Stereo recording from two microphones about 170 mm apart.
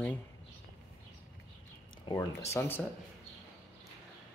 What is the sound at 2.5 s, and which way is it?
Speech, 10° left (ahead or behind).